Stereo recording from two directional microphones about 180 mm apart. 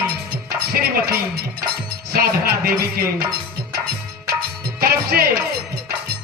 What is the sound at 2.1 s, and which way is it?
Speech, 60° right (ahead or behind).